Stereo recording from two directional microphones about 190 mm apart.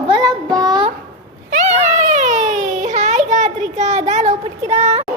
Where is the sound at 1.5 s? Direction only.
35° right (ahead or behind).